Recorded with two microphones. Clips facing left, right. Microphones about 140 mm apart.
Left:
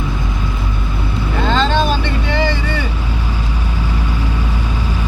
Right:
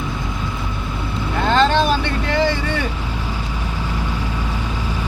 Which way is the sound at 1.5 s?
5° right (ahead or behind).